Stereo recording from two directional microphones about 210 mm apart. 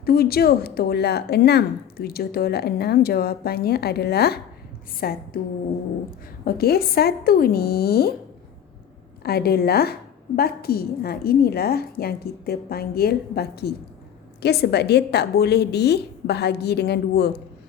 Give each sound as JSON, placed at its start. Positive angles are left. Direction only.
{"t": 0.0, "sound": "a woman's voice", "side_deg": 45}
{"t": 6.4, "sound": "a woman's voice", "side_deg": 45}
{"t": 9.2, "sound": "a woman's voice", "side_deg": 50}